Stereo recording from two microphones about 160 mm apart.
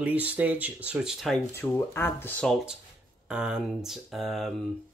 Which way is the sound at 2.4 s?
5° right (ahead or behind).